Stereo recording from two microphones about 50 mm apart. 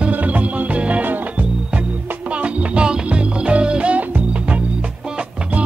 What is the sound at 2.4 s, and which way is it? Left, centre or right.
Music, right.